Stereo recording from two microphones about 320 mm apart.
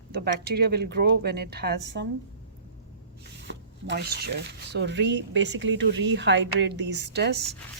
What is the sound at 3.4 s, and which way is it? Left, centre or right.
Speech, right.